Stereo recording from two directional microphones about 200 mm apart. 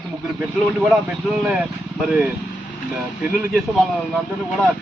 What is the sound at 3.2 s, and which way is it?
A man's voice, 10° right (ahead or behind).